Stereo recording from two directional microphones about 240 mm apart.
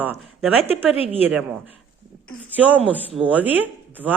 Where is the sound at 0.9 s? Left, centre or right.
Left.